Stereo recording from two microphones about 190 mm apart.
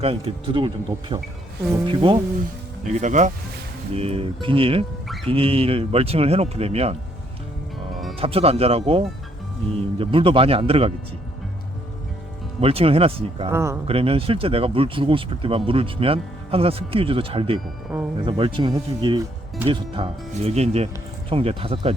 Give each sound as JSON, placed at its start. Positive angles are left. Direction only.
{"t": 0.0, "sound": "speech", "side_deg": -30}
{"t": 2.8, "sound": "speech", "side_deg": -40}
{"t": 8.2, "sound": "speech", "side_deg": -30}
{"t": 12.5, "sound": "speech", "side_deg": -30}
{"t": 13.5, "sound": "speech", "side_deg": -15}
{"t": 13.8, "sound": "speech", "side_deg": -30}